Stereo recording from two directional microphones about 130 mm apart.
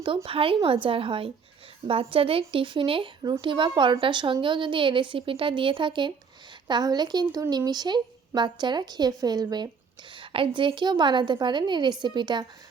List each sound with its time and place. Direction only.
0.3 s a woman's voice: 45° right (ahead or behind)